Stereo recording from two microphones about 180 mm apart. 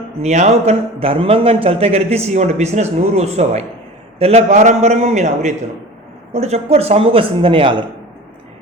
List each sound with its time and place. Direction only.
0.2 s a man's voice: 40° right (ahead or behind)